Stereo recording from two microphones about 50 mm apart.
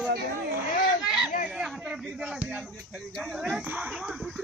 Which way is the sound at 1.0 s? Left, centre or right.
Centre.